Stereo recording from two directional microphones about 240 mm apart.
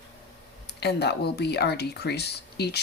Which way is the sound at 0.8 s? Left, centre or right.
Left.